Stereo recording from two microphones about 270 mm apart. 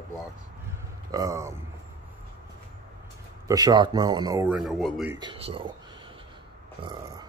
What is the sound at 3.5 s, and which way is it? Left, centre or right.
Speech, centre.